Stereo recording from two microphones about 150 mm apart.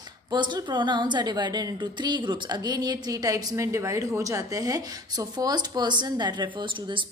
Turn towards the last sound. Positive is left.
turn(degrees=-35)  # may be behind; listen again after turning